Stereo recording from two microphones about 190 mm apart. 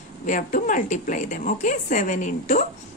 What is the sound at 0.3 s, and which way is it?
A woman's voice, 45° left (ahead or behind).